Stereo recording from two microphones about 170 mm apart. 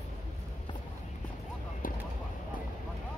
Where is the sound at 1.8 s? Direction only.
55° left (ahead or behind).